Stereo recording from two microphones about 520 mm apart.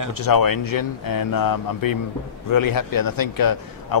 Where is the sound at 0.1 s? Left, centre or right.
Left.